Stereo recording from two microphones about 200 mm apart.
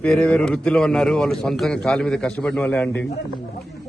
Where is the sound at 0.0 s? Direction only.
5° left (ahead or behind).